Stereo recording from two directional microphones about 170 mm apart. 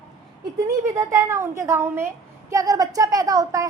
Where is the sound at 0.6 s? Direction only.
20° right (ahead or behind).